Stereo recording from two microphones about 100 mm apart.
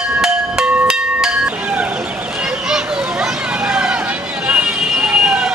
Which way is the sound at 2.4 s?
5° right (ahead or behind).